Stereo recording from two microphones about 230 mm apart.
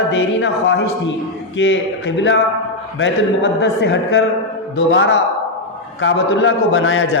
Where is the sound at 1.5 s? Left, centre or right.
Left.